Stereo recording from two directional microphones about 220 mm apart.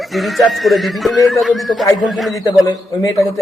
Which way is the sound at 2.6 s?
15° left (ahead or behind).